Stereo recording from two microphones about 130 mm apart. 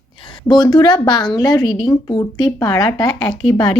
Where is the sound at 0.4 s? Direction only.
35° left (ahead or behind).